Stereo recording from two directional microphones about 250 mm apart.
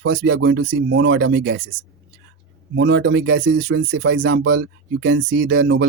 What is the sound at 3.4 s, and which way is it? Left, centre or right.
Speech, right.